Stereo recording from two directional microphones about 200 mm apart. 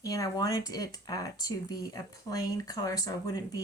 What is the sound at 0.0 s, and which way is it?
Speech, 15° left (ahead or behind).